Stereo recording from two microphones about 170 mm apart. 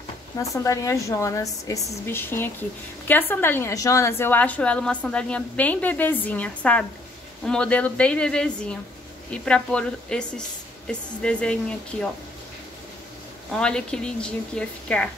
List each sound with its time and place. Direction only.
0.4 s a woman's voice: 20° left (ahead or behind)
13.5 s a woman's voice: 5° left (ahead or behind)